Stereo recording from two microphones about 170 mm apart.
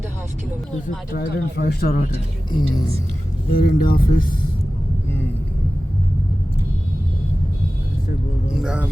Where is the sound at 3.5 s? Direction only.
60° left (ahead or behind).